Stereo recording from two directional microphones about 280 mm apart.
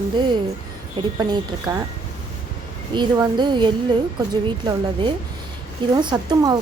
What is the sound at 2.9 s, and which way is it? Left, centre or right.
Speech, centre.